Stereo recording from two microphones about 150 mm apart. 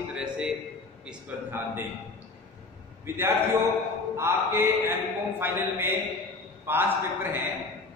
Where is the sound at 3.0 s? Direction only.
15° right (ahead or behind).